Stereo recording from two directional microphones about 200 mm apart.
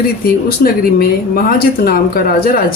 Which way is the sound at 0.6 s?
45° left (ahead or behind).